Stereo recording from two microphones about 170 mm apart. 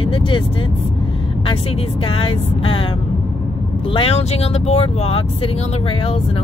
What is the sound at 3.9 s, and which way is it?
Speech, 35° left (ahead or behind).